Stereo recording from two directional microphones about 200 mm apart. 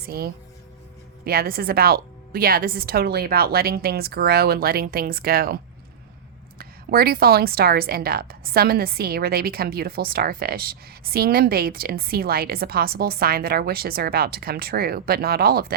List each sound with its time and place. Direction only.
0.0 s a woman's voice: 50° right (ahead or behind)
6.6 s a woman's voice: 50° right (ahead or behind)